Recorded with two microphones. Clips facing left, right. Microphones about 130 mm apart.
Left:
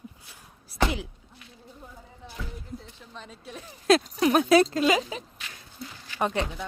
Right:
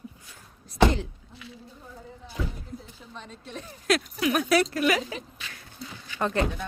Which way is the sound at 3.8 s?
30° left (ahead or behind).